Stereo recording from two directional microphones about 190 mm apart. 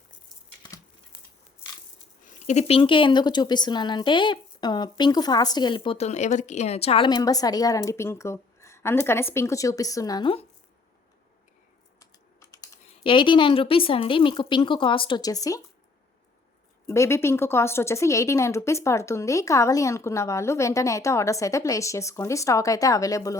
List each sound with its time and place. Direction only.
2.2 s speech: 40° left (ahead or behind); by 10.3 s 20° left (ahead or behind)
11.9 s typing: 15° left (ahead or behind)
13.0 s speech: 25° left (ahead or behind)
16.8 s a woman's voice: 15° left (ahead or behind)